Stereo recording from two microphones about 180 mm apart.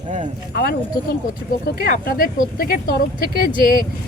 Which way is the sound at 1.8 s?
55° left (ahead or behind).